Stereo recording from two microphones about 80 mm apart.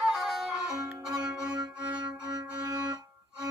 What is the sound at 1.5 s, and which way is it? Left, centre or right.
Music, right.